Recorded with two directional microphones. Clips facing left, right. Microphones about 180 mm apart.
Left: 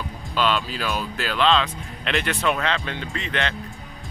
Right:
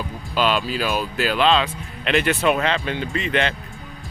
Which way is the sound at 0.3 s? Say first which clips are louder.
Right 3 dB; 10° right (ahead or behind).